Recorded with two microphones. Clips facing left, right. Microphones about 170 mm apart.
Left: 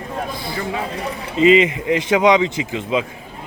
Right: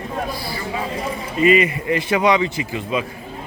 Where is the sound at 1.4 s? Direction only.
20° left (ahead or behind).